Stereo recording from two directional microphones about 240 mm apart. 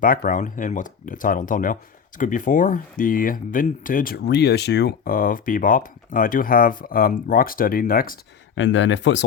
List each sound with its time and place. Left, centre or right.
0.0 s speech: left
8.5 s speech: left